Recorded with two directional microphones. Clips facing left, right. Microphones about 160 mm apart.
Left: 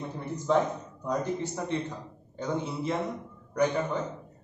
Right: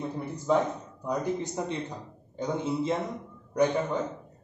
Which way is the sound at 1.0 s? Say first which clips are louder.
Even; 15° right (ahead or behind).